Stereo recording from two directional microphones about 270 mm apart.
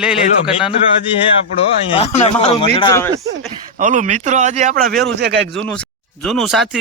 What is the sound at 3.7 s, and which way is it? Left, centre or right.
Speech, right.